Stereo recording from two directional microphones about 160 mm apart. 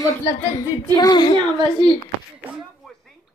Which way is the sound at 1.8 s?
30° right (ahead or behind).